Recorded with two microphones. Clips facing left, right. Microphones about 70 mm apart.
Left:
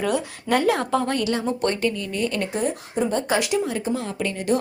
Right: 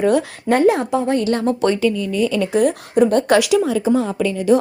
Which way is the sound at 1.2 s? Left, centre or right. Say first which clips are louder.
Right 5 dB; right.